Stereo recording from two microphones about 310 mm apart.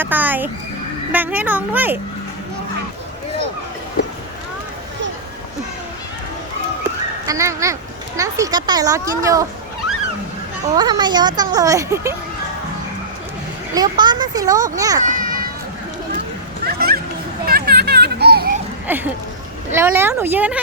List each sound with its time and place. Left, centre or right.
0.0 s a child's voice: centre
6.8 s speech: centre
10.8 s a child's voice: centre
13.7 s a child's voice: centre
15.0 s children playing: right
16.6 s children playing: right
18.9 s a child's voice: centre